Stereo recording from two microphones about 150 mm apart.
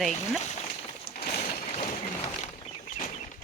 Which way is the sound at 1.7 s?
50° left (ahead or behind).